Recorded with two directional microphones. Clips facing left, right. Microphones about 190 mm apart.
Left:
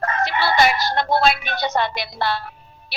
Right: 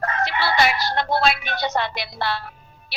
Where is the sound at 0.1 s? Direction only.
45° left (ahead or behind).